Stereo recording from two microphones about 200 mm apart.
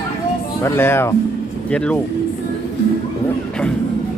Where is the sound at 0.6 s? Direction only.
10° left (ahead or behind).